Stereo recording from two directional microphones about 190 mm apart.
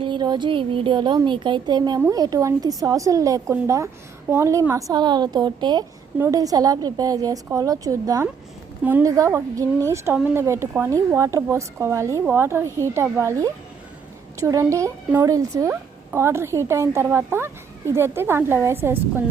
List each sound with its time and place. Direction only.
0.0 s a woman's voice: 25° right (ahead or behind)